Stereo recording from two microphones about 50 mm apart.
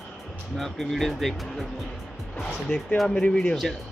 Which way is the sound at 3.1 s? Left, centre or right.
Left.